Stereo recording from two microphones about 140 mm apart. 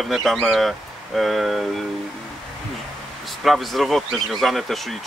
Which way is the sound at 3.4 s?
Centre (ahead or behind).